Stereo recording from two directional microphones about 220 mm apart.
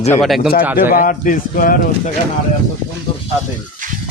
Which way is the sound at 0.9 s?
40° left (ahead or behind).